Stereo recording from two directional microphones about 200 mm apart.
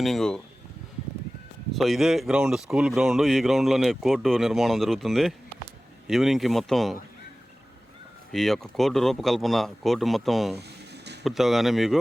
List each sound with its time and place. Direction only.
0.0 s speech: centre (ahead or behind)
1.7 s speech: centre (ahead or behind)
8.3 s speech: centre (ahead or behind)
10.6 s a sound: 55° right (ahead or behind)
11.2 s speech: centre (ahead or behind)